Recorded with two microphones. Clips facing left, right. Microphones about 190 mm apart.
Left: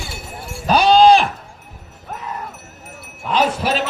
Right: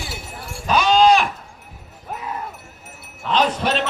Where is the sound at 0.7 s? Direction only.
35° left (ahead or behind).